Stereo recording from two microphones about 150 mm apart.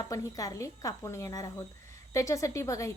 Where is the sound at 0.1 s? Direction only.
25° left (ahead or behind).